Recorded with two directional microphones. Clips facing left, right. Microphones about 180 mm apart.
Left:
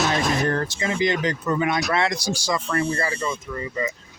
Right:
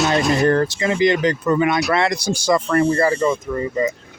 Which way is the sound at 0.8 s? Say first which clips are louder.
Right 4 dB; 75° right (ahead or behind).